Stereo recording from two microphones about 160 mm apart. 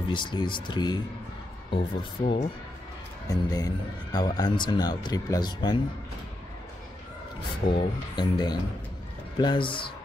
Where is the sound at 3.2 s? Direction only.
25° left (ahead or behind).